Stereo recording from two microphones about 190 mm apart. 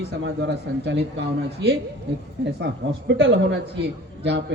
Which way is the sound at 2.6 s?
70° right (ahead or behind).